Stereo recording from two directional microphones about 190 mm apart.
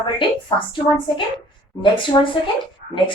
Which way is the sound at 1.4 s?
25° left (ahead or behind).